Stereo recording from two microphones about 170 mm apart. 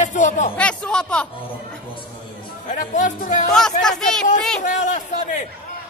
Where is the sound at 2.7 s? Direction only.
50° left (ahead or behind).